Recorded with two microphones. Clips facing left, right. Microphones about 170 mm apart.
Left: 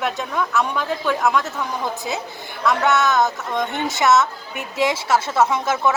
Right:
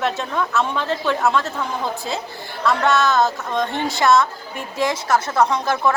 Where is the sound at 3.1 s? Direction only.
20° left (ahead or behind).